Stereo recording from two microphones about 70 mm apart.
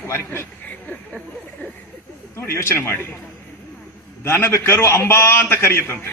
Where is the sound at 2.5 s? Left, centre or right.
Left.